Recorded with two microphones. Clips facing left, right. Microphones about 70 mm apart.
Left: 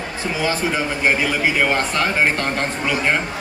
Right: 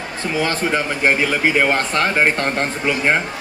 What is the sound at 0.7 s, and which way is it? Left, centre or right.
A man's voice, right.